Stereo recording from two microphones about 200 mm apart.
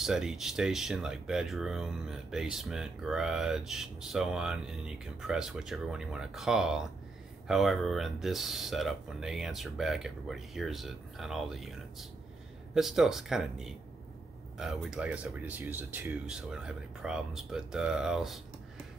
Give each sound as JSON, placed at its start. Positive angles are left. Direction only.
{"t": 0.0, "sound": "speech", "side_deg": 0}